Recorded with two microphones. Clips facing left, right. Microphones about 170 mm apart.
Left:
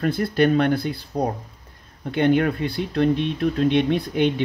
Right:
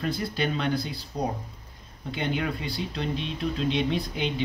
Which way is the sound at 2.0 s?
55° left (ahead or behind).